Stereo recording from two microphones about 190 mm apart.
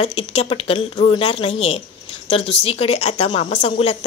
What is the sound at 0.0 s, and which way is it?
A woman's voice, 30° left (ahead or behind).